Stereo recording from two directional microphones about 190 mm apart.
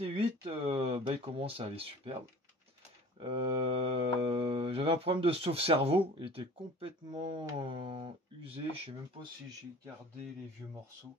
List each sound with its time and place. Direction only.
0.0 s speech: 30° right (ahead or behind)
3.2 s speech: 30° right (ahead or behind)
10.6 s speech: 15° right (ahead or behind)